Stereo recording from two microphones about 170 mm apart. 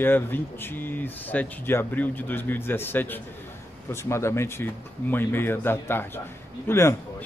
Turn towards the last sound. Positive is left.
turn(degrees=15)  # may be behind; listen again after turning